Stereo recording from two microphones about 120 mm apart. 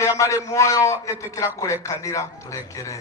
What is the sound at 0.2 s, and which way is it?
A man's voice, 25° left (ahead or behind).